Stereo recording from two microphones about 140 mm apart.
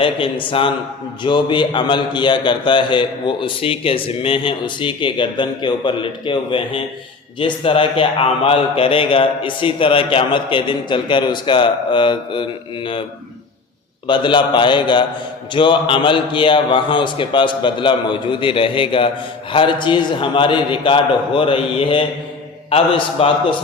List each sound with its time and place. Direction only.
0.0 s a man's voice: 40° left (ahead or behind)
14.1 s a man's voice: 35° left (ahead or behind)